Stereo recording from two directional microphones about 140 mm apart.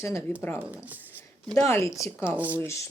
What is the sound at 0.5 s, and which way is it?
Speech, 10° right (ahead or behind).